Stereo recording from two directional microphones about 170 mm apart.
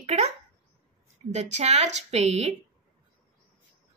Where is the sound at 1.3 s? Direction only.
40° right (ahead or behind).